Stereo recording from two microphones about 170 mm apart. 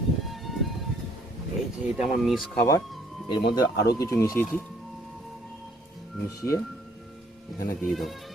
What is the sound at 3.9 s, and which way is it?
Speech, 15° left (ahead or behind).